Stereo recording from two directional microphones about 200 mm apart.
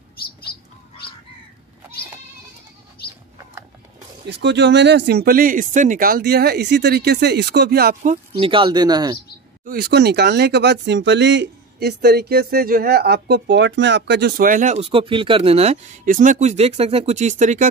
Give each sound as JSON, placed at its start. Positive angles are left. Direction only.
{"t": 4.3, "sound": "speech", "side_deg": -60}
{"t": 8.4, "sound": "speech", "side_deg": -25}
{"t": 9.7, "sound": "speech", "side_deg": -50}